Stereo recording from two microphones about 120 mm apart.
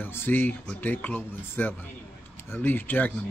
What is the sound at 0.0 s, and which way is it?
Speech, 20° left (ahead or behind).